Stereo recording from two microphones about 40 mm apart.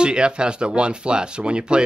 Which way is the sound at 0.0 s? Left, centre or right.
Right.